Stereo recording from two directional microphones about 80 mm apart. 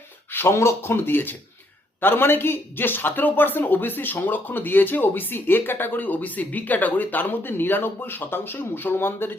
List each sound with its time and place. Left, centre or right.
0.3 s speech: left